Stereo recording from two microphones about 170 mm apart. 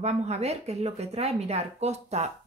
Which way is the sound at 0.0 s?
40° right (ahead or behind).